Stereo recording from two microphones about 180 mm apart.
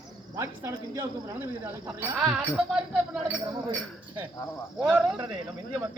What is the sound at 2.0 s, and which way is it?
Speech, 5° right (ahead or behind).